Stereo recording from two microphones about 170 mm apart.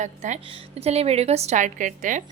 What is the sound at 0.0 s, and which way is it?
A woman's voice, 45° right (ahead or behind).